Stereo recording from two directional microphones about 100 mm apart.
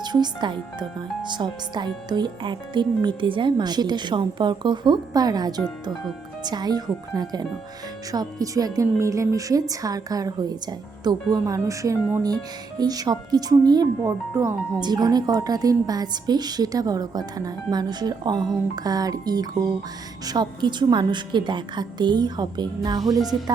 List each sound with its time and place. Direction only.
0.0 s a woman's voice: 45° right (ahead or behind)
14.0 s speech: 30° right (ahead or behind)
14.8 s a woman's voice: 45° right (ahead or behind)